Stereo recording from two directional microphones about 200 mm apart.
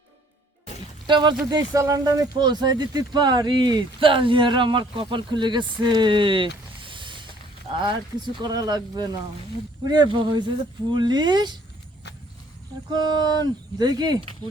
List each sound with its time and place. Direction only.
1.0 s speech: 20° right (ahead or behind)
6.8 s vehicle: 25° right (ahead or behind)
7.8 s speech: 20° right (ahead or behind)
12.9 s speech: 20° right (ahead or behind)